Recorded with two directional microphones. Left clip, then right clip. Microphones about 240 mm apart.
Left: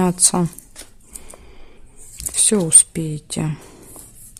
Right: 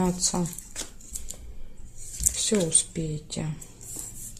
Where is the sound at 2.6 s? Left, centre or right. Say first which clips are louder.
Left 8 dB; left.